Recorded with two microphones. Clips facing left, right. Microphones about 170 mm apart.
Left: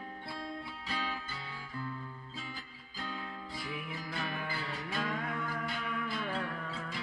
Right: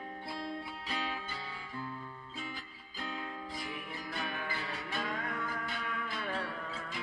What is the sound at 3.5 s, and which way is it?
Music, centre (ahead or behind).